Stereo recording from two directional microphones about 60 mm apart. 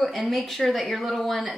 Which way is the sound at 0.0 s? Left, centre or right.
Centre.